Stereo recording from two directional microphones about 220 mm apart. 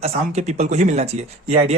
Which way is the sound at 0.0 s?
30° right (ahead or behind).